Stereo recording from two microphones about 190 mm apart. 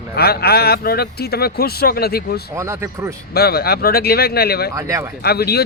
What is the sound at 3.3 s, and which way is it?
Speech, 55° left (ahead or behind).